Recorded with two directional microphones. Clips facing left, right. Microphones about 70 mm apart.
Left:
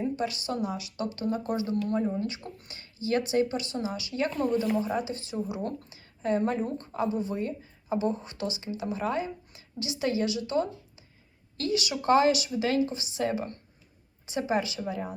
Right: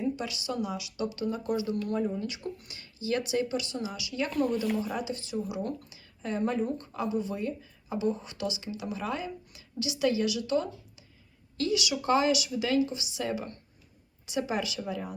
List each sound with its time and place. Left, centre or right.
0.0 s speech: left
4.3 s speech: centre
4.9 s a woman's voice: left